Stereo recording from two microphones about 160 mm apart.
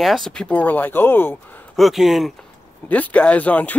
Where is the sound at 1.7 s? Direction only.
Centre (ahead or behind).